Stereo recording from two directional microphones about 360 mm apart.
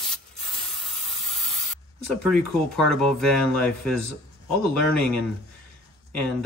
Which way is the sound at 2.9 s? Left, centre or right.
Centre.